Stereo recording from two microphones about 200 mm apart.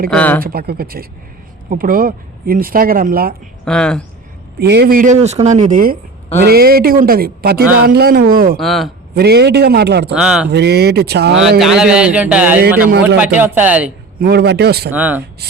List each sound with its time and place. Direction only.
0.1 s speech: 5° left (ahead or behind)
0.4 s speech: 50° right (ahead or behind)
3.7 s a man's voice: 5° left (ahead or behind)
4.6 s speech: 55° right (ahead or behind)
8.5 s a man's voice: centre (ahead or behind)
9.1 s a man's voice: 55° right (ahead or behind)
10.2 s a man's voice: 5° right (ahead or behind)
10.5 s a man's voice: 55° right (ahead or behind)
11.6 s a man's voice: 5° right (ahead or behind)
14.2 s a man's voice: 55° right (ahead or behind)
14.8 s speech: 10° right (ahead or behind)